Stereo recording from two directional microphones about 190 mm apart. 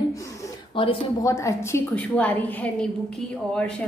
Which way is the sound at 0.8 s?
30° left (ahead or behind).